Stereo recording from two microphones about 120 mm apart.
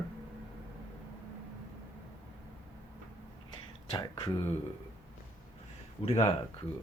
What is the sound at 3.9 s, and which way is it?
Speech, 40° left (ahead or behind).